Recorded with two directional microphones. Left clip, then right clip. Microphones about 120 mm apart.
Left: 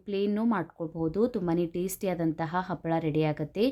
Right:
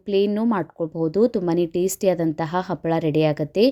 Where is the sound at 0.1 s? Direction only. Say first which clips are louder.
Right 8 dB; 45° right (ahead or behind).